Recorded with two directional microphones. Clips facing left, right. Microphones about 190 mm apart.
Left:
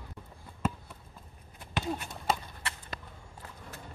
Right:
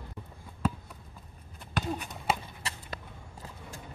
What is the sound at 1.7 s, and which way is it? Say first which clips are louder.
Run: right 1 dB; centre (ahead or behind).